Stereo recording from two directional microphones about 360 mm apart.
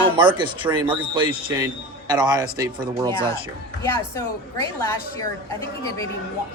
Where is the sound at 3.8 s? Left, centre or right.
Centre.